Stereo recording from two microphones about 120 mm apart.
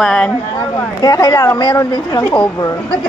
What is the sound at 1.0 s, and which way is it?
A woman's voice, 30° left (ahead or behind).